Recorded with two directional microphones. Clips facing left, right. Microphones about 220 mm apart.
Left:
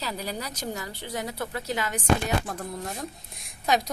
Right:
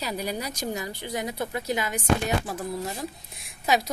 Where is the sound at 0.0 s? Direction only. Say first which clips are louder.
Right 3 dB; 15° right (ahead or behind).